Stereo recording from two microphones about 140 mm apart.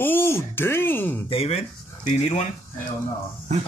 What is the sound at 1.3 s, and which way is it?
Speech, 45° left (ahead or behind).